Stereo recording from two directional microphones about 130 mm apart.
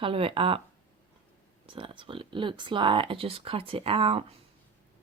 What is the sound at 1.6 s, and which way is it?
Speech, 40° right (ahead or behind).